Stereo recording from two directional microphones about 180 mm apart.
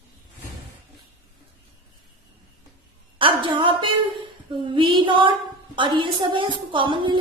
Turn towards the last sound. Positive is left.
turn(degrees=-30)  # may be behind; listen again after turning